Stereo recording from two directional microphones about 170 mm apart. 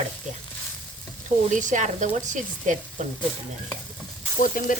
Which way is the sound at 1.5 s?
45° right (ahead or behind).